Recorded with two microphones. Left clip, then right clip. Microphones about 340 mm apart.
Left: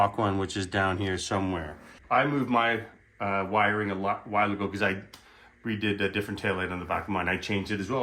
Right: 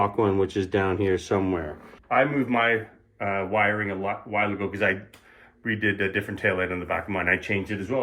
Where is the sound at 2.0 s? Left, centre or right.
Centre.